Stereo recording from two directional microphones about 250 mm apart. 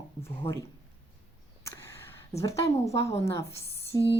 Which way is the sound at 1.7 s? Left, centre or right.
Centre.